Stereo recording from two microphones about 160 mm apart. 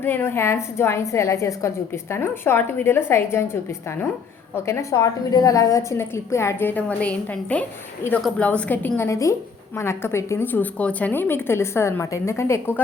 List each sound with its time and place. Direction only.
0.0 s a woman's voice: 15° left (ahead or behind)